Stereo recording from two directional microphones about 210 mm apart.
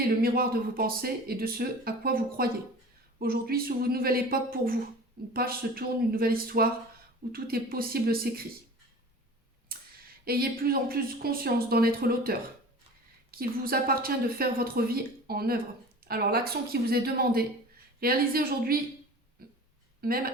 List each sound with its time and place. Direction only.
0.2 s speech: 45° right (ahead or behind)
9.7 s a sound: 45° right (ahead or behind)
10.2 s speech: 45° right (ahead or behind)
19.4 s burping: 45° right (ahead or behind)
20.0 s speech: 45° right (ahead or behind)